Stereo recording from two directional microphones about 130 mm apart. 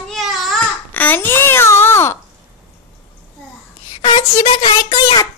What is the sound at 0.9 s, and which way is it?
A child's voice, 15° left (ahead or behind).